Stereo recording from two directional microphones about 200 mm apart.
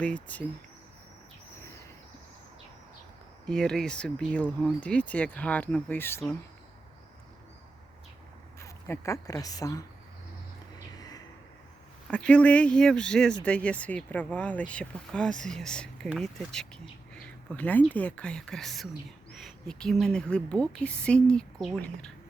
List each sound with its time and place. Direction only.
0.0 s speech: 5° left (ahead or behind)
3.4 s speech: 5° left (ahead or behind)
8.5 s speech: 15° left (ahead or behind)
10.8 s music: 20° left (ahead or behind)
12.1 s speech: 5° left (ahead or behind)